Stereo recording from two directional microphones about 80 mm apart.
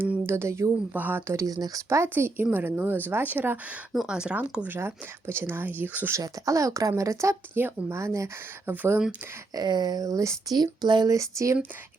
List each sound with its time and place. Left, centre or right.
0.2 s speech: right
0.9 s speech: right
1.3 s speech: right
1.9 s speech: right
3.9 s speech: centre
4.8 s speech: right
6.2 s speech: right
8.7 s speech: right
9.6 s speech: right
11.1 s speech: right